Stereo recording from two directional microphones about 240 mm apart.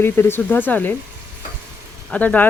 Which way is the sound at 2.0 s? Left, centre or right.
Centre.